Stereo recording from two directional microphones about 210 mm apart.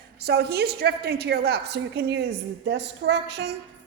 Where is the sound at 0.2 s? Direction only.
50° right (ahead or behind).